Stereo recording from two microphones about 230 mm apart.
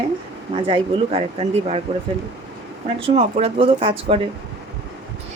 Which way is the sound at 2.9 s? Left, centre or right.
Right.